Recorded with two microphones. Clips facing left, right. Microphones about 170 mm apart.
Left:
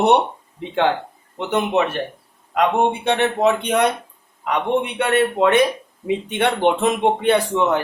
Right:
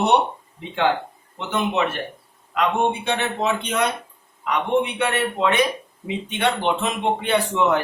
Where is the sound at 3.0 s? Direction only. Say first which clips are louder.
Left 6 dB; 60° left (ahead or behind).